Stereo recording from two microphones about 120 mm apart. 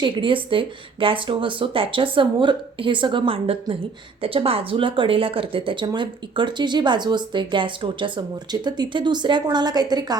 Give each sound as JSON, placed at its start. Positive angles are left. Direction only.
{"t": 0.0, "sound": "speech", "side_deg": -45}